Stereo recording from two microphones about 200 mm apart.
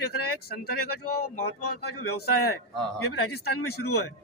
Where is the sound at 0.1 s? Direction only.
50° left (ahead or behind).